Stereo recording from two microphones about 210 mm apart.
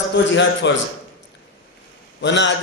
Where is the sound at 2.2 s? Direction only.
60° left (ahead or behind).